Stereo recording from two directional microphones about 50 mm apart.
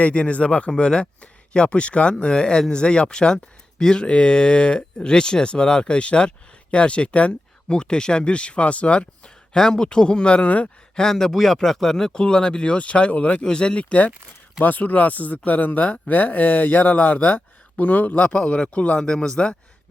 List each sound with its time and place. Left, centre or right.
0.0 s speech: left
11.0 s speech: centre; by 14.1 s left
14.6 s speech: left
18.9 s speech: centre